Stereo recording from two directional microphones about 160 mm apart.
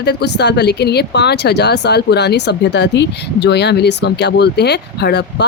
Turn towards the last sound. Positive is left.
turn(degrees=90)